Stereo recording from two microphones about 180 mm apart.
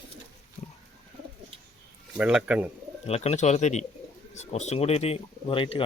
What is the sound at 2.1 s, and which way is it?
Speech, 5° right (ahead or behind).